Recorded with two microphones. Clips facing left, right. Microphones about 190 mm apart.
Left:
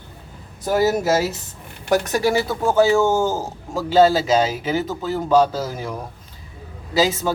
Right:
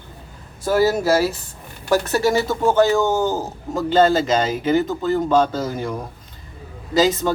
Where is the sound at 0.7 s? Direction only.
20° left (ahead or behind).